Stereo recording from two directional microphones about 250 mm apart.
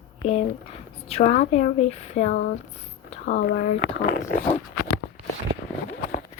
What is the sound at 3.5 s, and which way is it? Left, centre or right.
Speech, left.